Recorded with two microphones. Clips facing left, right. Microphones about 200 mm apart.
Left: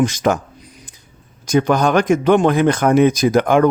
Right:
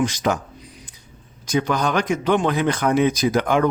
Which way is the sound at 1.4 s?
50° left (ahead or behind).